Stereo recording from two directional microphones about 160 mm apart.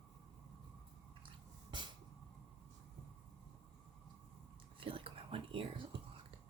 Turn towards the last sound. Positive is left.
turn(degrees=-35)  # may be behind; listen again after turning